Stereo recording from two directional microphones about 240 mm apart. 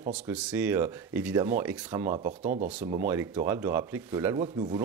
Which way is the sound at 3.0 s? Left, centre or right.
Centre.